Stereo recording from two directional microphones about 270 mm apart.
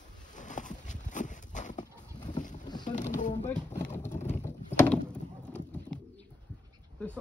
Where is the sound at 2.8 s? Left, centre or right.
Left.